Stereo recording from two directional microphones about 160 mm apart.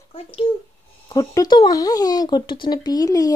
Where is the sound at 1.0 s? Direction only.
25° left (ahead or behind).